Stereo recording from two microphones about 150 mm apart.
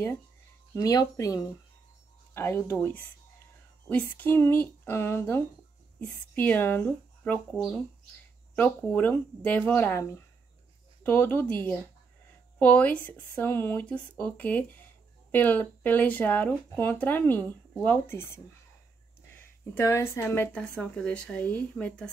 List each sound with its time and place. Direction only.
0.7 s speech: 20° left (ahead or behind)
19.4 s speech: 15° left (ahead or behind)